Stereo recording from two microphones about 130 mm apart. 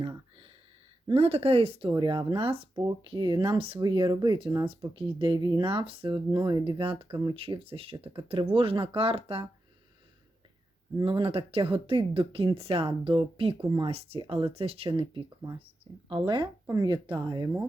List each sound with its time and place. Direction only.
1.0 s speech: 50° right (ahead or behind)
1.9 s speech: 35° right (ahead or behind)
6.1 s speech: 30° right (ahead or behind)
10.9 s speech: 40° right (ahead or behind)